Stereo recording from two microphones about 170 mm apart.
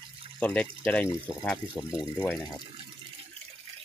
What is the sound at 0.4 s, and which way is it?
Speech, 10° left (ahead or behind).